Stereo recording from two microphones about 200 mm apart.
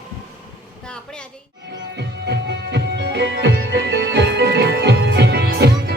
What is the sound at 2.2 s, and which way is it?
Music, 60° right (ahead or behind).